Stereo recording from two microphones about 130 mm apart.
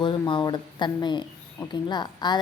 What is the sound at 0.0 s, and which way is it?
A woman's voice, 40° left (ahead or behind).